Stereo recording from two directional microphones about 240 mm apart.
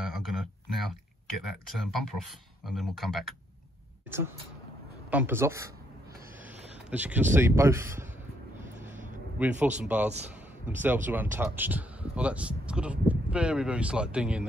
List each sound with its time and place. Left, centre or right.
0.0 s a sound: centre
1.8 s speech: centre
5.1 s speech: centre
6.9 s speech: centre
9.4 s speech: centre